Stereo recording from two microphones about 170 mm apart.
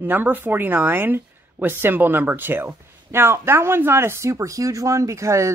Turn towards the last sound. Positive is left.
turn(degrees=-15)  # may be behind; listen again after turning